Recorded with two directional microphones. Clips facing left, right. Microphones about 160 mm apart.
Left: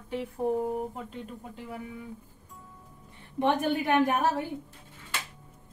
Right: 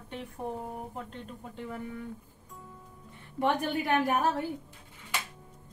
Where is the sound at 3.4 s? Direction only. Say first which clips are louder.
Left 3 dB; 20° left (ahead or behind).